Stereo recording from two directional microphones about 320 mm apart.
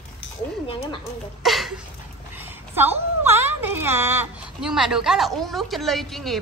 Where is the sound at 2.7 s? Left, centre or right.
Centre.